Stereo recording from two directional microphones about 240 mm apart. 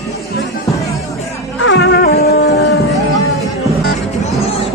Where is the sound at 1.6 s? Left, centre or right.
Left.